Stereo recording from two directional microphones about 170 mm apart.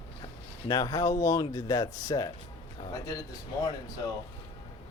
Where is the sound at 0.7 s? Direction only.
20° left (ahead or behind).